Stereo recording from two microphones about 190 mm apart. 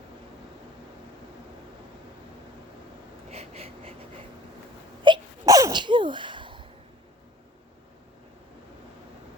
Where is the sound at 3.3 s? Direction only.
35° right (ahead or behind).